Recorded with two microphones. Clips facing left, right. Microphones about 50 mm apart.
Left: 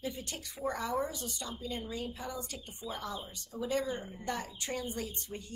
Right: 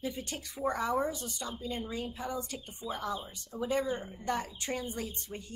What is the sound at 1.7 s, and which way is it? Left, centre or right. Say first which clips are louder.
A woman's voice: right 1 dB; centre.